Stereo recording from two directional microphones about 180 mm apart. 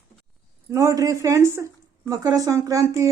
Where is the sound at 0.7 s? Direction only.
15° right (ahead or behind).